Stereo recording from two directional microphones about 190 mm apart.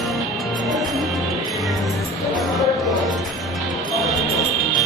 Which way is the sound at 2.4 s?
Centre (ahead or behind).